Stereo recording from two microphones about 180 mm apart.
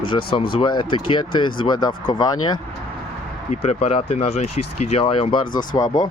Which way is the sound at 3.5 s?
35° left (ahead or behind).